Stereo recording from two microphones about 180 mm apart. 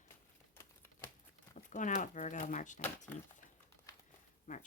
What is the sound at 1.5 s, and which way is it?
Speech, 45° left (ahead or behind).